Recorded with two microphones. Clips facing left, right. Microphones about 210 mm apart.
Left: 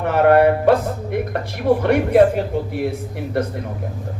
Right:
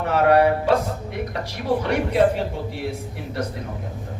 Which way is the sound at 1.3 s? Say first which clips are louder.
Left 5 dB; 55° left (ahead or behind).